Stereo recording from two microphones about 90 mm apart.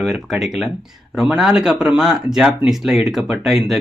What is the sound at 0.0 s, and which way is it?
Speech, centre (ahead or behind).